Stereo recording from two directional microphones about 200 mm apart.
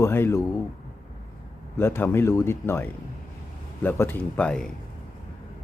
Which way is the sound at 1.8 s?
10° left (ahead or behind).